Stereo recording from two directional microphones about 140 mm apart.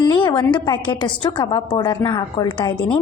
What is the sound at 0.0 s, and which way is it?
A woman's voice, 30° left (ahead or behind).